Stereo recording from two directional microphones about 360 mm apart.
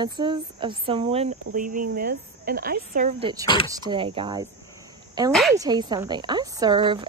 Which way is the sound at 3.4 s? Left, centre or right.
Centre.